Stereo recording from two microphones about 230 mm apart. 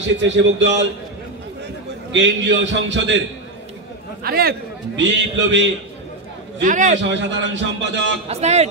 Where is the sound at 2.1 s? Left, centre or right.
Right.